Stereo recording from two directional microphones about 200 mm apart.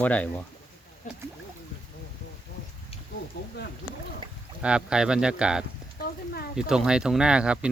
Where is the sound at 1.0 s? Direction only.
40° left (ahead or behind).